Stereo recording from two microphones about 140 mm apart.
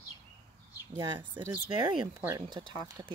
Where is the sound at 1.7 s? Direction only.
35° right (ahead or behind).